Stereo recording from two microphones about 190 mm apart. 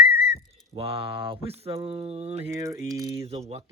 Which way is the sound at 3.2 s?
35° right (ahead or behind).